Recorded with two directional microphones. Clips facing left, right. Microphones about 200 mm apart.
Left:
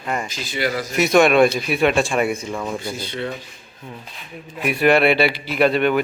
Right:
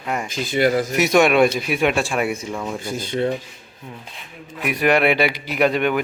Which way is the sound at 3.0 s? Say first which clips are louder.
Right 5 dB; 45° right (ahead or behind).